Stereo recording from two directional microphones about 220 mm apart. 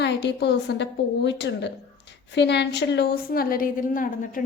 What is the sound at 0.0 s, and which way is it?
A woman's voice, 50° left (ahead or behind).